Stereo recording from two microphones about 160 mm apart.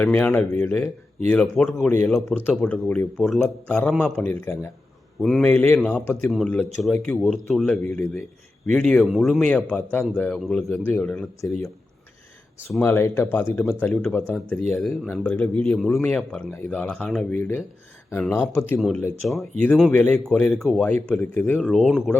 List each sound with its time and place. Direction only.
0.0 s speech: 10° left (ahead or behind)
11.3 s speech: 20° left (ahead or behind)
12.8 s speech: 15° left (ahead or behind)
18.8 s speech: centre (ahead or behind)